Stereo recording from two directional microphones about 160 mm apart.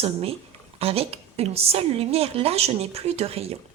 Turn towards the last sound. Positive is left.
turn(degrees=-40)  # may be behind; listen again after turning